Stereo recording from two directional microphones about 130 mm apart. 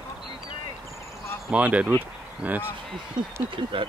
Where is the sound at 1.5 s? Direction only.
10° right (ahead or behind).